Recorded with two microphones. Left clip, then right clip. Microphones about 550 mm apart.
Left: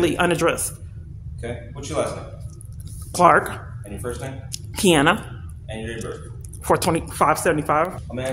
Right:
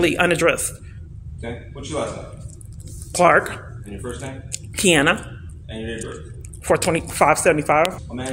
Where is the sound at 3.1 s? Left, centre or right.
Left.